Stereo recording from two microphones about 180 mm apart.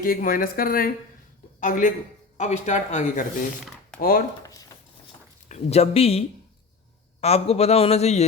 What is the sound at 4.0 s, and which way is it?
Speech, 50° left (ahead or behind).